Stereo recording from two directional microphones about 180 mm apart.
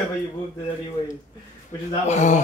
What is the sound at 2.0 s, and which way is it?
Speech, 40° left (ahead or behind).